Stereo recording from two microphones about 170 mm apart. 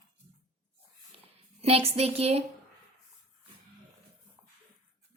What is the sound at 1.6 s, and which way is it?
Speech, 35° right (ahead or behind).